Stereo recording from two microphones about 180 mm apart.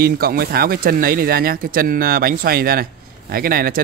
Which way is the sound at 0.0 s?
55° right (ahead or behind).